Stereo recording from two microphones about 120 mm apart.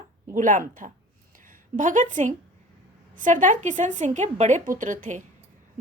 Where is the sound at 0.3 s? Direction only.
90° right.